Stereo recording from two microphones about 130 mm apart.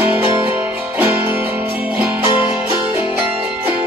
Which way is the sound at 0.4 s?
15° right (ahead or behind).